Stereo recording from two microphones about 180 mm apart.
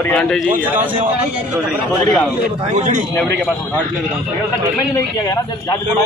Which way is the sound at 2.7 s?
40° right (ahead or behind).